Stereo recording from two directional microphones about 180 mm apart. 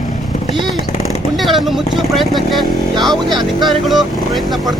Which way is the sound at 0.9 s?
35° left (ahead or behind).